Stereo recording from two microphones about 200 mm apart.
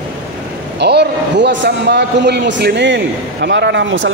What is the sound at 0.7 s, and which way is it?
A man's voice, 60° right (ahead or behind).